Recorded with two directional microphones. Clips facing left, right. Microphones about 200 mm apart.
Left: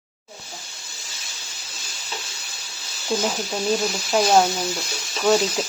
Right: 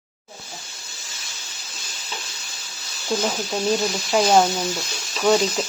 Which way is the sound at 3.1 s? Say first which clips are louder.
Even; centre (ahead or behind).